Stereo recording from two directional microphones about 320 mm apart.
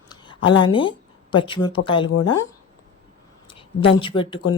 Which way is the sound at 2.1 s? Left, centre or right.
Left.